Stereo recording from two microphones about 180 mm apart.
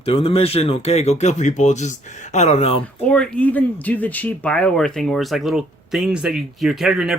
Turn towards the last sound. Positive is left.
turn(degrees=0)  # may be behind; listen again after turning